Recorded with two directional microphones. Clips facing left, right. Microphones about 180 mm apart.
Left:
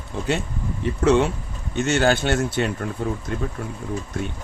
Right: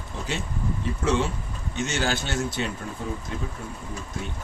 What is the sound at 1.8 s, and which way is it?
Speech, 55° left (ahead or behind).